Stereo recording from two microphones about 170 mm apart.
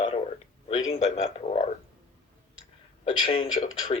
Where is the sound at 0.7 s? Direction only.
40° left (ahead or behind).